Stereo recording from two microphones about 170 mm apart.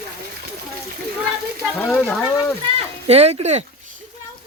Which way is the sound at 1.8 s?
10° left (ahead or behind).